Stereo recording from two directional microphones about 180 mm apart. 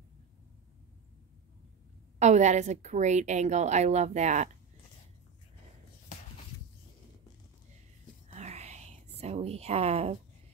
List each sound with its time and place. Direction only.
2.1 s a woman's voice: 40° right (ahead or behind)
8.3 s whispering: 35° right (ahead or behind)